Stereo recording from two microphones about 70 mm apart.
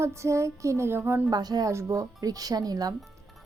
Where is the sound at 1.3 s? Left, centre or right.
Right.